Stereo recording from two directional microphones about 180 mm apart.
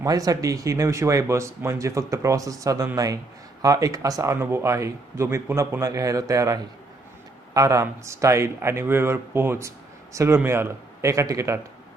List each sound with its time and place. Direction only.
0.0 s speech: 20° right (ahead or behind)